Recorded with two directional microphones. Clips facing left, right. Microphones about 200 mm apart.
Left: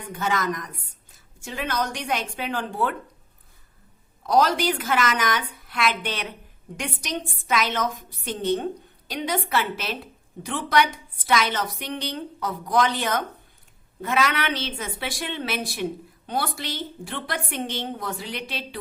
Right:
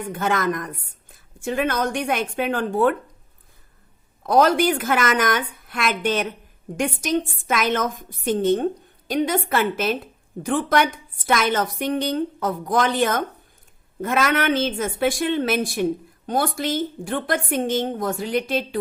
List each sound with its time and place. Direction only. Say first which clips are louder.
0.1 s a woman's voice: right 3 dB; 55° right (ahead or behind)
4.2 s a woman's voice: right 4 dB; 50° right (ahead or behind)